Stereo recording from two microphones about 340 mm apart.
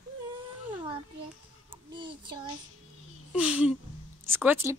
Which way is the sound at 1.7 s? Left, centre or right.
Centre.